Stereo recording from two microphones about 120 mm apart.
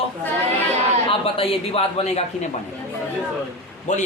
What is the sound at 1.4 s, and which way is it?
Speech, 50° left (ahead or behind).